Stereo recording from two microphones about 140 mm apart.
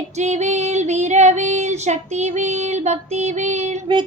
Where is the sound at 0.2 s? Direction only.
55° right (ahead or behind).